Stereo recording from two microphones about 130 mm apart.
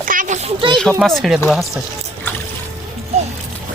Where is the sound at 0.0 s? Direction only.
90° right.